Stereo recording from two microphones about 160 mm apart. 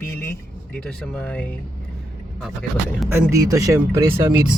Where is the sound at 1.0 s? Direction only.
10° left (ahead or behind).